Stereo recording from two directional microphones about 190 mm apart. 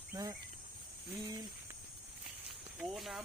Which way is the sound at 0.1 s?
20° right (ahead or behind).